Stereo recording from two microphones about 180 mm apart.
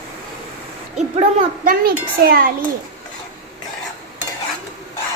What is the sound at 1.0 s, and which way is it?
A child's voice, 40° right (ahead or behind).